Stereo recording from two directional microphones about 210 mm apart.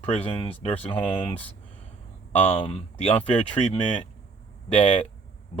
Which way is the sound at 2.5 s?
25° left (ahead or behind).